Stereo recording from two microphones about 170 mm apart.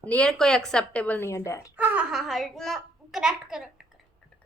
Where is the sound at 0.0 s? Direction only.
5° left (ahead or behind).